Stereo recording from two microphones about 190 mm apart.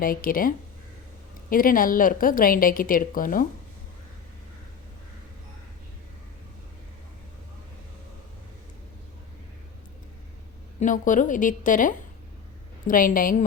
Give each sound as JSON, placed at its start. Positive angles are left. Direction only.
{"t": 0.0, "sound": "a woman's voice", "side_deg": 50}
{"t": 10.8, "sound": "a woman's voice", "side_deg": 45}